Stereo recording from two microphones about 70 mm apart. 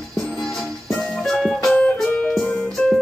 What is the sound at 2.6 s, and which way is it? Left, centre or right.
Music, centre.